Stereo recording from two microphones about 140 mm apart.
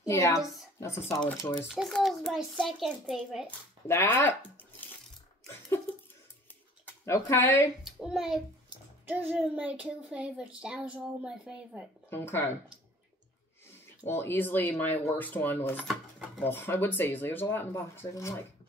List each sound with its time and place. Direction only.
0.0 s a woman's voice: 20° left (ahead or behind)
1.7 s a child's voice: centre (ahead or behind)
3.4 s speech: 15° left (ahead or behind)
6.9 s speech: 20° left (ahead or behind)
7.8 s a child's voice: 5° right (ahead or behind)
12.1 s speech: 15° left (ahead or behind)
14.0 s speech: 15° left (ahead or behind)
15.9 s a sound: 5° right (ahead or behind)
16.4 s speech: 15° left (ahead or behind)